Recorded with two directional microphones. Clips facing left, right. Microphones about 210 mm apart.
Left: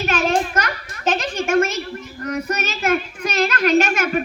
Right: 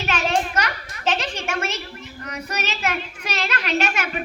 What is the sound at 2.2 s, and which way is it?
Child singing, 50° left (ahead or behind).